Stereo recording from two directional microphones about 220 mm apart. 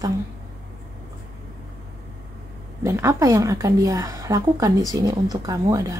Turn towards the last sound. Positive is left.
turn(degrees=-15)  # may be behind; listen again after turning